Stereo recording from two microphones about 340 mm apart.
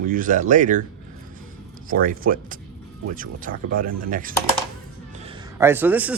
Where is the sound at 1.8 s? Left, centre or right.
Right.